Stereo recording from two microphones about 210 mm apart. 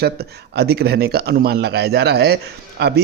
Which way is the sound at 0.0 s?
50° right (ahead or behind).